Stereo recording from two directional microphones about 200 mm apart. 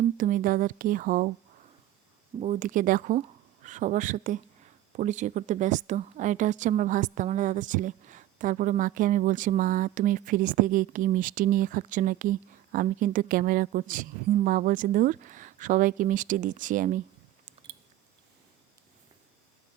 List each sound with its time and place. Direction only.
0.2 s speech: 40° right (ahead or behind)
2.4 s a woman's voice: 40° right (ahead or behind)